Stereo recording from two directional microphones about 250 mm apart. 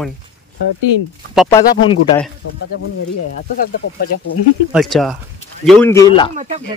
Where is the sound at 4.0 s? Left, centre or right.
Left.